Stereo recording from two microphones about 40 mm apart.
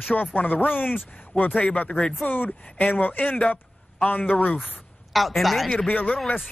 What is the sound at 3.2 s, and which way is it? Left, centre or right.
Speech, left.